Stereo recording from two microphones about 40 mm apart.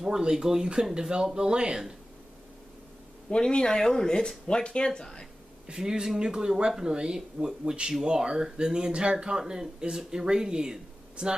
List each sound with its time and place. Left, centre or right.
0.0 s speech: centre
3.3 s speech: left
5.7 s speech: centre
7.4 s speech: centre
8.0 s speech: right